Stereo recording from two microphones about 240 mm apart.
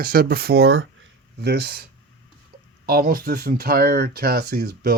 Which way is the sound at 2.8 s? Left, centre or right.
Right.